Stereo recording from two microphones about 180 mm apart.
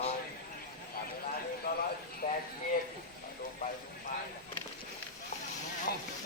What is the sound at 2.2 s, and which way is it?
Speech, 50° left (ahead or behind).